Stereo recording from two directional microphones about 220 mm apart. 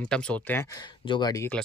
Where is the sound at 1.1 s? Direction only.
15° left (ahead or behind).